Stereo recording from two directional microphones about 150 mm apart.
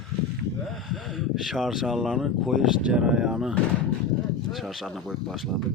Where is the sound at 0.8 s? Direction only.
Centre (ahead or behind).